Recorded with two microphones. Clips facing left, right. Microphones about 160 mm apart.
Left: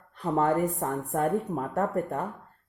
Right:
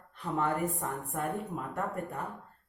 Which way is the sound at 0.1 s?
40° left (ahead or behind).